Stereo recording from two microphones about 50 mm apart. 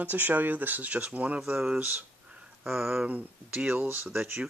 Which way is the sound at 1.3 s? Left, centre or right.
Centre.